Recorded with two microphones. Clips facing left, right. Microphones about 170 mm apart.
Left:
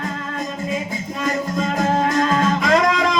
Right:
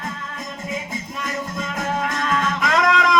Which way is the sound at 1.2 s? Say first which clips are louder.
Left 8 dB; 35° left (ahead or behind).